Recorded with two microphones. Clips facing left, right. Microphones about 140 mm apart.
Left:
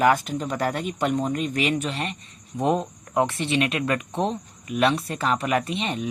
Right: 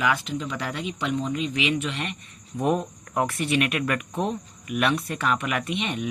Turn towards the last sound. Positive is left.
turn(degrees=35)  # may be behind; listen again after turning